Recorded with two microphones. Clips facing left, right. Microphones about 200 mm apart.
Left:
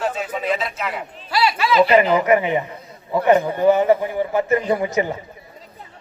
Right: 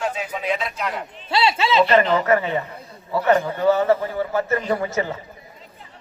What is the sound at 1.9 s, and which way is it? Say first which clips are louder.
A man's voice: left 2 dB; 10° left (ahead or behind).